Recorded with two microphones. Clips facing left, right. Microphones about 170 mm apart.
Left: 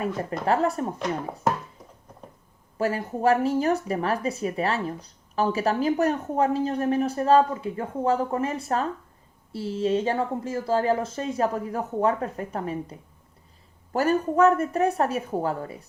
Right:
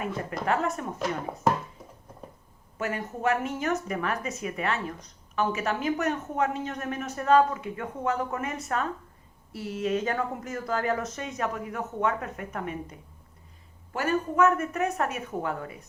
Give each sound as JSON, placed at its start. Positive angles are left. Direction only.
{"t": 0.4, "sound": "speech", "side_deg": 35}
{"t": 0.9, "sound": "speech", "side_deg": 0}
{"t": 2.7, "sound": "speech", "side_deg": 35}